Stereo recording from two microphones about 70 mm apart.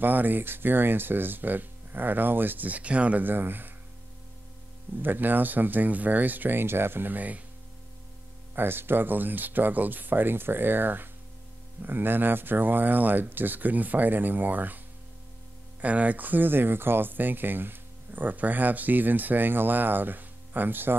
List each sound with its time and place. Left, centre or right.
0.0 s speech: right
5.0 s speech: right
8.5 s speech: right
15.8 s speech: right